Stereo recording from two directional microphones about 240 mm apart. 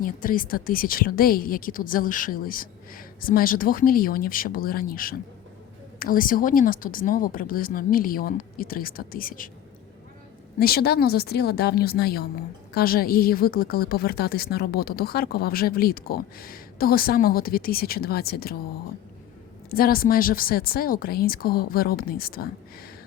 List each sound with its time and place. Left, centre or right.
0.0 s a woman's voice: left
10.6 s a woman's voice: left
19.7 s a woman's voice: left